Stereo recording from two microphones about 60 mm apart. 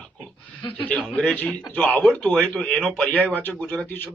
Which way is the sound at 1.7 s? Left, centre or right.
Left.